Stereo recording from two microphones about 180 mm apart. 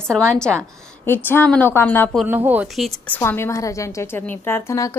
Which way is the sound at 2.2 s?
10° right (ahead or behind).